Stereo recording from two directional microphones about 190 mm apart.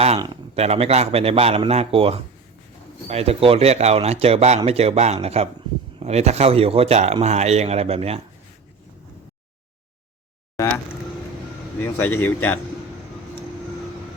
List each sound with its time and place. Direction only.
0.5 s speech: 35° right (ahead or behind)
11.8 s a man's voice: 10° left (ahead or behind)